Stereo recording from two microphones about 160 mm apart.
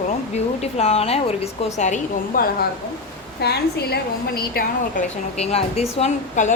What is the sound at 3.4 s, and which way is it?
A woman's voice, 90° left.